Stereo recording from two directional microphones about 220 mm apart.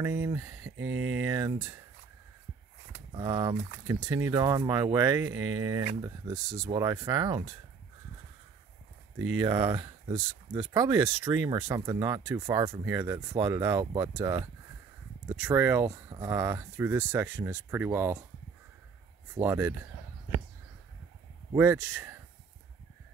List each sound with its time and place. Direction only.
0.0 s speech: 10° right (ahead or behind)
0.7 s a sound: 60° right (ahead or behind)
1.2 s speech: 15° right (ahead or behind)
3.1 s speech: 20° right (ahead or behind)
5.3 s speech: 65° right (ahead or behind)
5.6 s speech: 15° right (ahead or behind)
9.4 s speech: 20° right (ahead or behind)
19.3 s speech: 10° right (ahead or behind)
21.5 s speech: 10° right (ahead or behind)